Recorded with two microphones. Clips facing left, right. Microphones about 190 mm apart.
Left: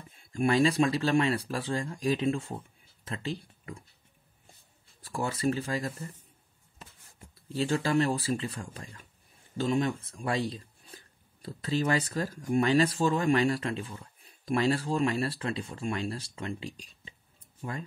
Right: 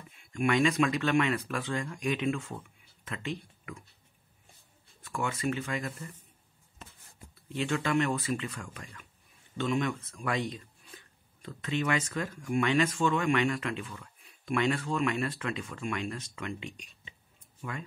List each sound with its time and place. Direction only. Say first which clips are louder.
0.1 s speech: left 2 dB; 35° left (ahead or behind)
5.0 s speech: left 3 dB; 35° left (ahead or behind)
7.3 s speech: left 2 dB; 35° left (ahead or behind)